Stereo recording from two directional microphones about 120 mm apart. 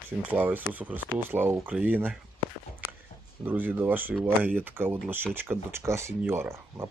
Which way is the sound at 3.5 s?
15° right (ahead or behind).